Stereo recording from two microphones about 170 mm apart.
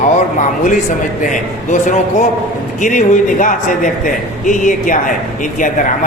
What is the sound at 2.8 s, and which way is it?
A man's voice, 50° left (ahead or behind).